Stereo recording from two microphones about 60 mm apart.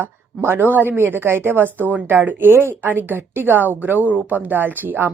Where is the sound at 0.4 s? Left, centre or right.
Right.